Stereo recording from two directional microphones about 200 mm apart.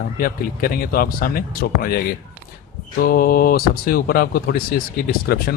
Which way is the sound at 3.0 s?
45° left (ahead or behind).